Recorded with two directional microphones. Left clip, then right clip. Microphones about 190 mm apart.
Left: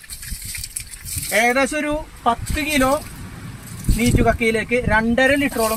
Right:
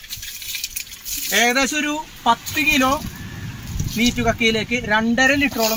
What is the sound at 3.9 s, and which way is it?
Speech, 5° left (ahead or behind).